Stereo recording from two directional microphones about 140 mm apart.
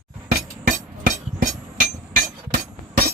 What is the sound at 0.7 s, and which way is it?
Hammer, 65° right (ahead or behind).